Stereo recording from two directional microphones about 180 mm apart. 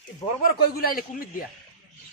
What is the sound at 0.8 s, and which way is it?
Speech, 55° left (ahead or behind).